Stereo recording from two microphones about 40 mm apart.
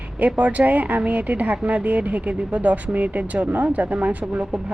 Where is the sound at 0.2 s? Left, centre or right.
Right.